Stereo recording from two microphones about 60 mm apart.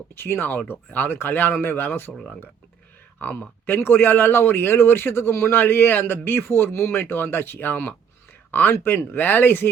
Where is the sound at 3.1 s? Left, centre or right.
Left.